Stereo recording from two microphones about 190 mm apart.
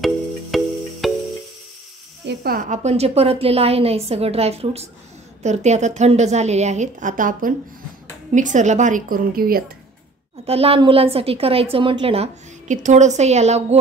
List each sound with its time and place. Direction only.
0.5 s music: centre (ahead or behind)
2.2 s a woman's voice: 50° right (ahead or behind)
10.4 s a woman's voice: 30° right (ahead or behind)